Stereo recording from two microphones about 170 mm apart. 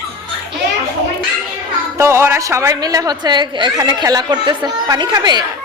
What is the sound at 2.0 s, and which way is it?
A woman's voice, 15° right (ahead or behind).